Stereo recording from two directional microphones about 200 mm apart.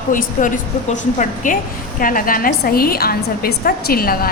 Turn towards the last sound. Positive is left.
turn(degrees=50)  # may be behind; listen again after turning